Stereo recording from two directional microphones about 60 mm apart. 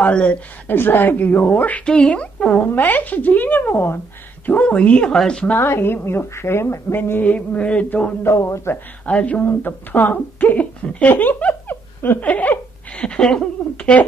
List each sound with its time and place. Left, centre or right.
0.0 s speech: left
0.7 s speech: left
1.9 s speech: centre; by 4.0 s left
4.5 s speech: left
5.6 s speech: left; by 8.1 s centre
8.2 s a man's voice: left
9.0 s speech: left
13.0 s speech: centre